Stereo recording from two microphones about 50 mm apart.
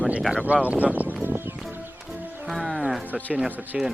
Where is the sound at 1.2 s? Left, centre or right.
Right.